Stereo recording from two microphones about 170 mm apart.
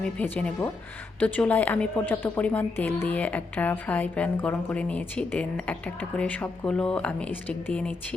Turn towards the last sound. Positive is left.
turn(degrees=10)  # may be behind; listen again after turning